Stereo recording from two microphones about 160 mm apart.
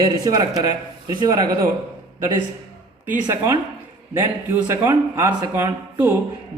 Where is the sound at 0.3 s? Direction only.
25° right (ahead or behind).